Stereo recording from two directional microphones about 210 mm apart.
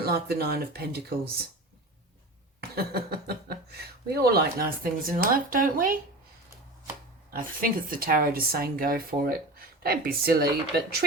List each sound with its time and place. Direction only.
0.0 s speech: 45° right (ahead or behind)
2.6 s speech: 50° right (ahead or behind)
7.3 s speech: 40° right (ahead or behind)